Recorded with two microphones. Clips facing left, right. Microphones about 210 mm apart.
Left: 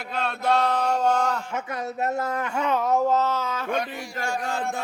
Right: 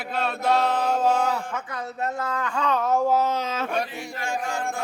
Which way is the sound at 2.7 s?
Centre (ahead or behind).